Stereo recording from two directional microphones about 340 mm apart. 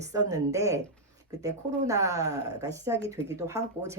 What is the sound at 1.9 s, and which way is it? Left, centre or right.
Speech, centre.